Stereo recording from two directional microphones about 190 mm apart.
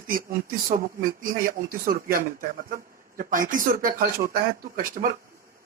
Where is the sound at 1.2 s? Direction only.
50° right (ahead or behind).